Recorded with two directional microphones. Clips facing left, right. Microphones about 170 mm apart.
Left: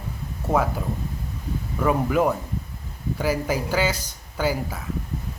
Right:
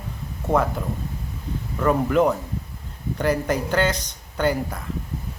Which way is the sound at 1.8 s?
5° left (ahead or behind).